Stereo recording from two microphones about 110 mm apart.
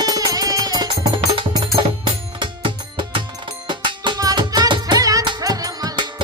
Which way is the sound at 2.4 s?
50° right (ahead or behind).